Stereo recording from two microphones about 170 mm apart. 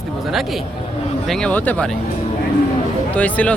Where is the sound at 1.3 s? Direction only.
5° left (ahead or behind).